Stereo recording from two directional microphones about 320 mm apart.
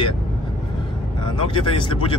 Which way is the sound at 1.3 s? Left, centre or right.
Centre.